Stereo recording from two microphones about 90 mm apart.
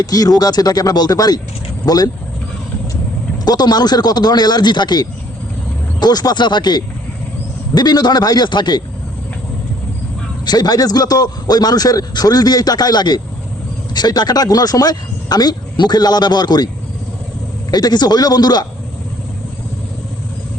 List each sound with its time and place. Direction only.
0.0 s a man's voice: 45° left (ahead or behind)
3.4 s a man's voice: 50° left (ahead or behind)
10.4 s a man's voice: 50° left (ahead or behind)
17.7 s a man's voice: 50° left (ahead or behind)